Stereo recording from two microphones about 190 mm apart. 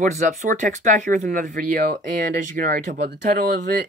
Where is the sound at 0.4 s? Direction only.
40° right (ahead or behind).